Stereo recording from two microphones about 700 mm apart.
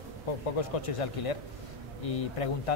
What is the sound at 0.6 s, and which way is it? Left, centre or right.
Speech, left.